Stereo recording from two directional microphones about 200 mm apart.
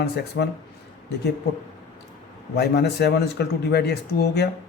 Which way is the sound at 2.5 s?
55° left (ahead or behind).